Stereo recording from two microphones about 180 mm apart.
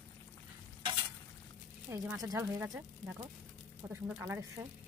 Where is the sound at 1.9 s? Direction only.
15° right (ahead or behind).